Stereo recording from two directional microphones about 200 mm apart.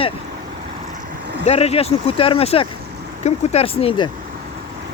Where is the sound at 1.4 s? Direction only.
30° left (ahead or behind).